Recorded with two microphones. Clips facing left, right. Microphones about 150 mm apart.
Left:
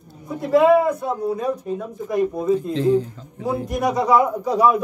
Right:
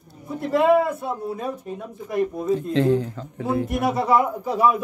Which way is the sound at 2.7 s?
65° right (ahead or behind).